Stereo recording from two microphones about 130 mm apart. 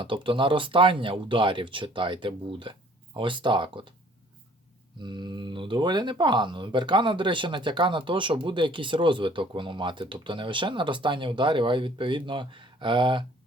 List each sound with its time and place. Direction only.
0.0 s speech: 40° right (ahead or behind)
4.9 s speech: 35° right (ahead or behind)